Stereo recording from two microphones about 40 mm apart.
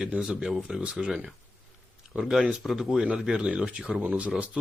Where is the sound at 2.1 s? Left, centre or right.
Centre.